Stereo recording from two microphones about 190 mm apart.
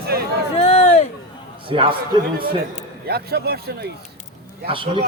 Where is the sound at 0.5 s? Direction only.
30° left (ahead or behind).